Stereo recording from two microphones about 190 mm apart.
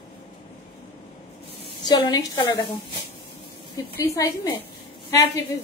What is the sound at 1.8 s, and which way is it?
Speech, 20° left (ahead or behind).